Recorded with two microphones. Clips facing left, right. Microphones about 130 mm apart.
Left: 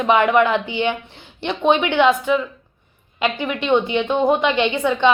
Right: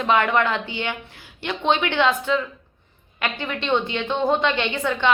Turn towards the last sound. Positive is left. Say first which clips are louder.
# left 6 dB
turn(degrees=20)  # may be behind; listen again after turning